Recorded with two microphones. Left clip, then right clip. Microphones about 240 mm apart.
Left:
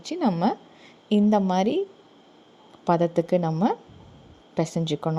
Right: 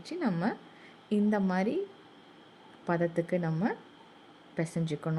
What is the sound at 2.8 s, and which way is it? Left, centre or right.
Speech, left.